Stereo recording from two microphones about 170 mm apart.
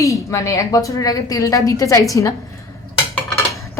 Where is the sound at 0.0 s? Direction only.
20° left (ahead or behind).